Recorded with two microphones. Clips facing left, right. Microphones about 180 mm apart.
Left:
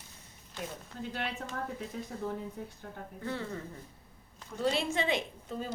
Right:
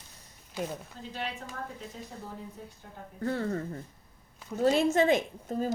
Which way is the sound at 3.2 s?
45° right (ahead or behind).